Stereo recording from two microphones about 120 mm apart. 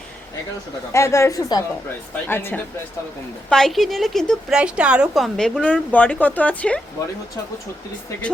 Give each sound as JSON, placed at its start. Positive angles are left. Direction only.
{"t": 0.9, "sound": "a woman's voice", "side_deg": 25}
{"t": 2.2, "sound": "a woman's voice", "side_deg": 20}
{"t": 3.5, "sound": "speech", "side_deg": 0}
{"t": 4.5, "sound": "a woman's voice", "side_deg": -10}